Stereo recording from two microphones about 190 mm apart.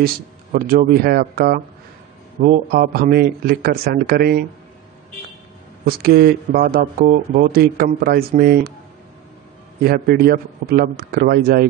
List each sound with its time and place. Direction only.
0.0 s speech: 50° right (ahead or behind)
5.9 s speech: 55° right (ahead or behind)
9.8 s speech: 55° right (ahead or behind)